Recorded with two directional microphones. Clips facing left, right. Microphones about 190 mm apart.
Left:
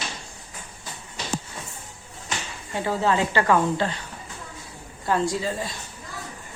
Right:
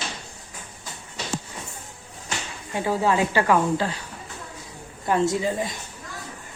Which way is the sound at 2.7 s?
10° right (ahead or behind).